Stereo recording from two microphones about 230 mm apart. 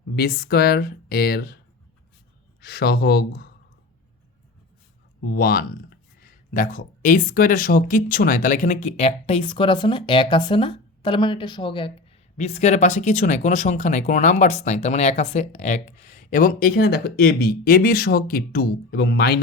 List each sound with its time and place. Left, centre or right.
0.2 s speech: left
2.6 s speech: left
5.2 s speech: left